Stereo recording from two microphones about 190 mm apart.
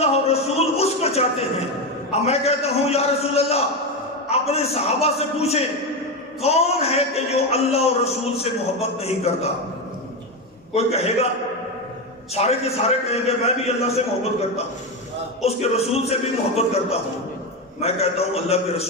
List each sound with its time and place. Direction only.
0.0 s music: 35° left (ahead or behind)
2.0 s a man's voice: 35° left (ahead or behind)
10.7 s a man's voice: 35° left (ahead or behind)
12.4 s a man's voice: 35° left (ahead or behind)
15.4 s a man's voice: 35° left (ahead or behind)